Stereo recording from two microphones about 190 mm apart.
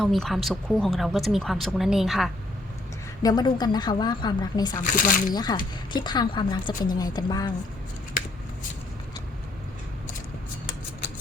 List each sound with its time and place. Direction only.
0.0 s speech: centre (ahead or behind)
3.2 s speech: 20° left (ahead or behind)
4.8 s speech: 45° left (ahead or behind)
5.3 s speech: 20° left (ahead or behind)